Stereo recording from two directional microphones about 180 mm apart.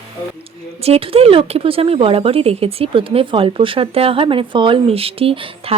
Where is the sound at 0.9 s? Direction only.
35° right (ahead or behind).